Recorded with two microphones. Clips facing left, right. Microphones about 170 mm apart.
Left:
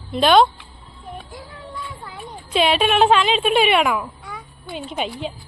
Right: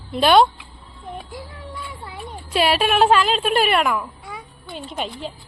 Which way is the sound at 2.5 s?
5° right (ahead or behind).